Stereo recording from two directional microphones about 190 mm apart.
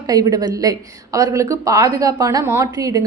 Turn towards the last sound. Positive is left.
turn(degrees=-20)  # may be behind; listen again after turning